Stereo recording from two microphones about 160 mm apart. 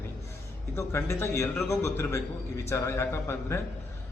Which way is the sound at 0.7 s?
15° left (ahead or behind).